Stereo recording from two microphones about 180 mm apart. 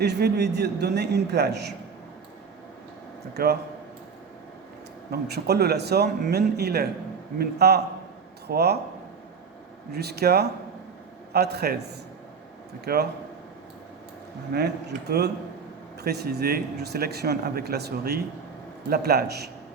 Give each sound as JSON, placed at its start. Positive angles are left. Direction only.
{"t": 0.0, "sound": "a man's voice", "side_deg": -65}
{"t": 3.3, "sound": "speech", "side_deg": -65}
{"t": 5.3, "sound": "speech", "side_deg": -65}
{"t": 9.9, "sound": "speech", "side_deg": -65}
{"t": 14.5, "sound": "speech", "side_deg": -65}